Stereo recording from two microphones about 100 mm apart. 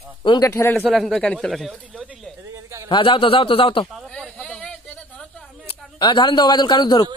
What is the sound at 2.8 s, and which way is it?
A man's voice, 60° left (ahead or behind).